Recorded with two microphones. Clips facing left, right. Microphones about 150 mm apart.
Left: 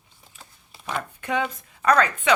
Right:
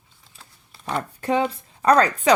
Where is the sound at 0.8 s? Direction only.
35° right (ahead or behind).